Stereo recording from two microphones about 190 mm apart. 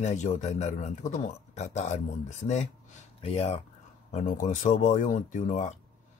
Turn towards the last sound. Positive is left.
turn(degrees=40)  # may be behind; listen again after turning